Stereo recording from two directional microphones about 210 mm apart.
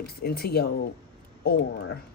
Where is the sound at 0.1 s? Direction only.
50° left (ahead or behind).